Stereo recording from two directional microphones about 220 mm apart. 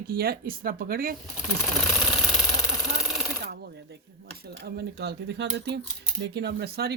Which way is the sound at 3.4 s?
45° right (ahead or behind).